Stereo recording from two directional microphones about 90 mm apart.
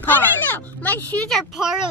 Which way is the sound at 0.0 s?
20° left (ahead or behind).